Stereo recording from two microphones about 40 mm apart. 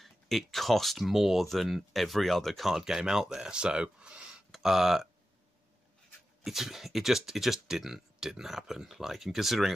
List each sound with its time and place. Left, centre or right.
0.0 s speech: centre
2.7 s speech: centre
4.5 s speech: centre
6.4 s speech: centre